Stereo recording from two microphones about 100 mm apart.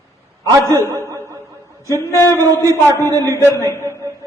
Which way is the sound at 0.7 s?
30° right (ahead or behind).